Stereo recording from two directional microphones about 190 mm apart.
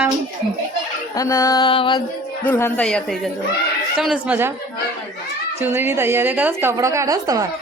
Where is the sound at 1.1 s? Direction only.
15° left (ahead or behind).